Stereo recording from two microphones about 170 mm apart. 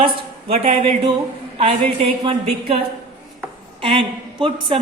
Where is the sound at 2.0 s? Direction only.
35° right (ahead or behind).